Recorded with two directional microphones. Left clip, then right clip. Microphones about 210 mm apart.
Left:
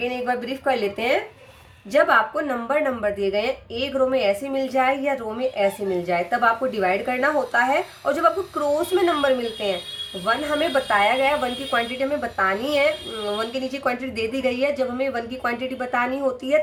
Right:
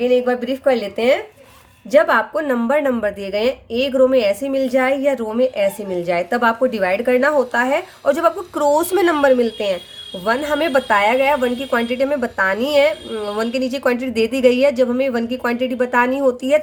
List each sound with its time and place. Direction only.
0.0 s a woman's voice: 45° right (ahead or behind)